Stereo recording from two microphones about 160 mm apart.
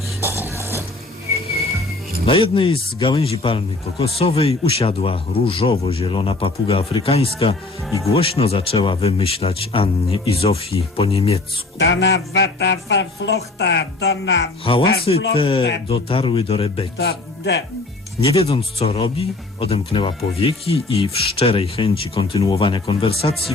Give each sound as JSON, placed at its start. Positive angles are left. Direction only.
{"t": 0.2, "sound": "music", "side_deg": -15}
{"t": 2.2, "sound": "speech", "side_deg": 35}
{"t": 11.8, "sound": "speech", "side_deg": 90}
{"t": 14.6, "sound": "speech", "side_deg": 35}
{"t": 17.0, "sound": "speech", "side_deg": 90}
{"t": 18.3, "sound": "speech", "side_deg": 35}